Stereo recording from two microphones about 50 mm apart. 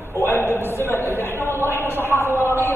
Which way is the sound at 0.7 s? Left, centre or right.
Left.